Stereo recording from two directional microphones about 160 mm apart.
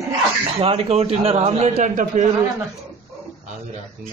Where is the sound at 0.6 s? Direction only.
35° right (ahead or behind).